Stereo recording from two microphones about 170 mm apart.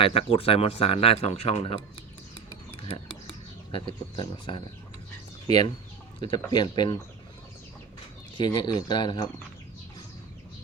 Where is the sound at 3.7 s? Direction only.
30° left (ahead or behind).